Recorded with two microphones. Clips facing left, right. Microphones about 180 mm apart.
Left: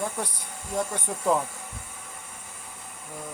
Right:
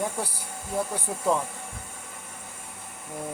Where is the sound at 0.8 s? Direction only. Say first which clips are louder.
Even; 5° right (ahead or behind).